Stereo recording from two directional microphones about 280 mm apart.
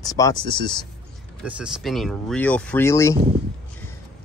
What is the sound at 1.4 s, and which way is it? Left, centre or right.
Speech, centre.